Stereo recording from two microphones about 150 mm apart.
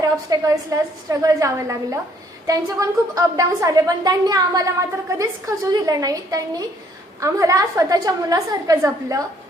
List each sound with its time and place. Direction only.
0.0 s a woman's voice: 25° right (ahead or behind)